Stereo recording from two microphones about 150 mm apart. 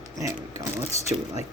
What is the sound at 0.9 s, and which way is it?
Speech, 45° left (ahead or behind).